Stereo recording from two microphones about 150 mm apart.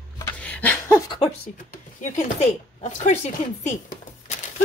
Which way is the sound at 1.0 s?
30° left (ahead or behind).